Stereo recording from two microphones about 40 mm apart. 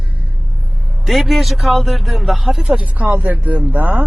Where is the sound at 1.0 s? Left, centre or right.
Centre.